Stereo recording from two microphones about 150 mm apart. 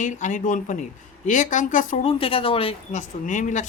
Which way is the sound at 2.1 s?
40° left (ahead or behind).